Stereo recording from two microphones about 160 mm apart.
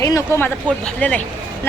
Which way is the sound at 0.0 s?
20° left (ahead or behind).